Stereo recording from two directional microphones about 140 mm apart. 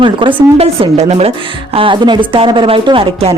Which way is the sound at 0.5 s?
50° right (ahead or behind).